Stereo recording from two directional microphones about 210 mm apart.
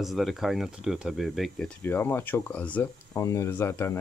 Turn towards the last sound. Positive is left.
turn(degrees=10)  # may be behind; listen again after turning